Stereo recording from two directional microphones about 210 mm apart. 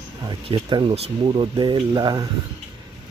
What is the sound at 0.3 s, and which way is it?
Speech, 20° right (ahead or behind).